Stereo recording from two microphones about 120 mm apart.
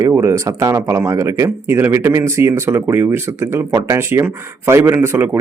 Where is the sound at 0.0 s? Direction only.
20° right (ahead or behind).